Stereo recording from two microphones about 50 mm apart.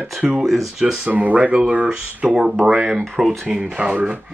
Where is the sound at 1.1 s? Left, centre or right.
Right.